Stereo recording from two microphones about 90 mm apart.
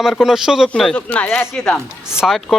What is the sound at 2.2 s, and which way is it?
Speech, centre (ahead or behind).